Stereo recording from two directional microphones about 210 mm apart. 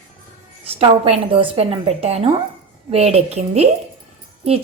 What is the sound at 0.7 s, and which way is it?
A woman's voice, 30° right (ahead or behind).